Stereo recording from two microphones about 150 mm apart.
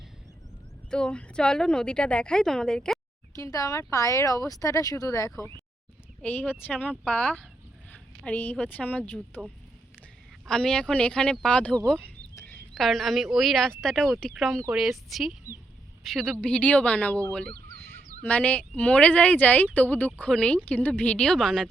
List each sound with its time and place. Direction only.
0.9 s a woman's voice: 5° left (ahead or behind)
3.3 s speech: 20° left (ahead or behind)
6.2 s speech: 10° left (ahead or behind)
10.4 s speech: 5° left (ahead or behind)
12.3 s a sound: 20° left (ahead or behind)
12.7 s a woman's voice: centre (ahead or behind)
17.5 s chicken: 90° right
18.2 s speech: 10° left (ahead or behind)